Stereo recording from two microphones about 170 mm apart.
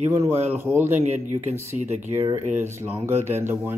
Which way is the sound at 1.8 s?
45° right (ahead or behind).